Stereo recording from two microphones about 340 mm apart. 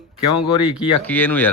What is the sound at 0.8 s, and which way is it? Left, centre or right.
Speech, centre.